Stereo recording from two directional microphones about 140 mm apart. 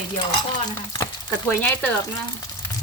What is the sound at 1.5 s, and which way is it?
Speech, 10° left (ahead or behind).